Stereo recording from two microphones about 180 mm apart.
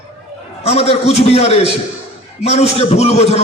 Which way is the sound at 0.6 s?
35° left (ahead or behind).